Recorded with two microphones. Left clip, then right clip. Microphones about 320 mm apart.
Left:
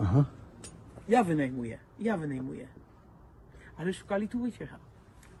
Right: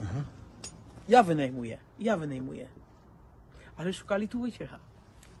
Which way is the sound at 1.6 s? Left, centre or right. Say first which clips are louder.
Even; centre.